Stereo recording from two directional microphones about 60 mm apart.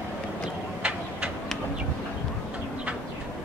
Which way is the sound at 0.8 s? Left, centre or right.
Right.